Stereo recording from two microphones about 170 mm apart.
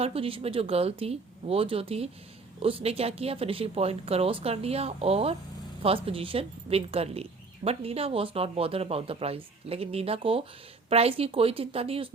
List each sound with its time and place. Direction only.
0.0 s speech: 35° right (ahead or behind)